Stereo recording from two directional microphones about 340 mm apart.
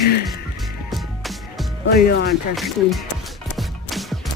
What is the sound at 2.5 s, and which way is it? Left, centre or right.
Speech, centre.